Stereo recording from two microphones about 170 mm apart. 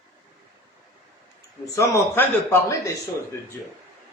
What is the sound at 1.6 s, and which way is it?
A man's voice, 20° left (ahead or behind).